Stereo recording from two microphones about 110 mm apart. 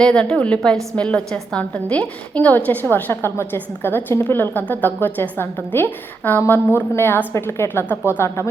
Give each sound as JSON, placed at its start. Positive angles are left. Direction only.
{"t": 0.0, "sound": "a woman's voice", "side_deg": 5}